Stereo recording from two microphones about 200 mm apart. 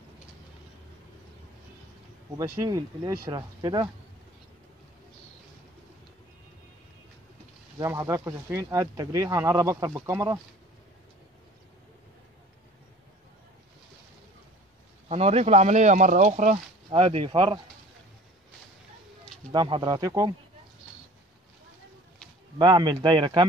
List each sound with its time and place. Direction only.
2.3 s speech: 20° right (ahead or behind)
7.8 s speech: 15° right (ahead or behind)
15.0 s speech: 30° right (ahead or behind)
19.5 s speech: 20° right (ahead or behind)
22.6 s speech: 20° right (ahead or behind)